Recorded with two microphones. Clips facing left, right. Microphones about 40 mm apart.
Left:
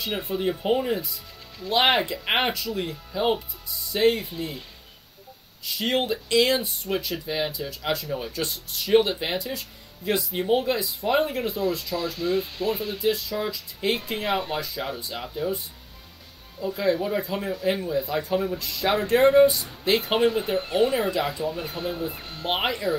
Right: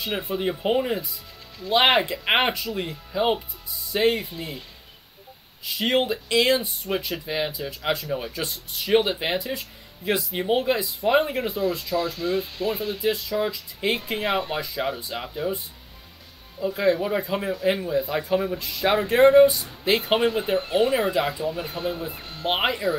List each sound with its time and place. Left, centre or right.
0.0 s speech: centre
5.7 s speech: centre